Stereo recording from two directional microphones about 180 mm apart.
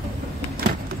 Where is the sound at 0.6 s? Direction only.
55° right (ahead or behind).